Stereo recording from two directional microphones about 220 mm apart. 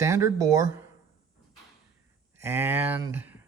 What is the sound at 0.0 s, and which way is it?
Speech, 15° right (ahead or behind).